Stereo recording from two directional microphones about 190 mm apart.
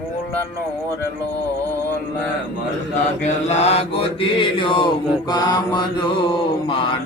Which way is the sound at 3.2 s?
35° left (ahead or behind).